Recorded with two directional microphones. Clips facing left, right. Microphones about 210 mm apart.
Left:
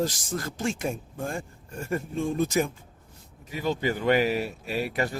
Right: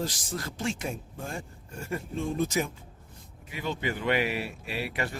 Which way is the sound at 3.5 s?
40° left (ahead or behind).